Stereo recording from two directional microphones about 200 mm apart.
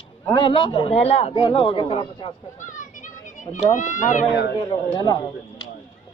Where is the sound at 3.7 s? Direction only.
40° left (ahead or behind).